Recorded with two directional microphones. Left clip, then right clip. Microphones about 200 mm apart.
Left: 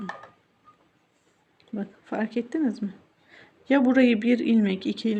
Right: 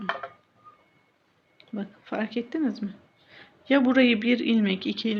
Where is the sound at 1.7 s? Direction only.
20° left (ahead or behind).